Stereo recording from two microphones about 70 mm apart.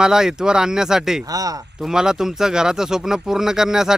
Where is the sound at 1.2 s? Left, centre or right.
Right.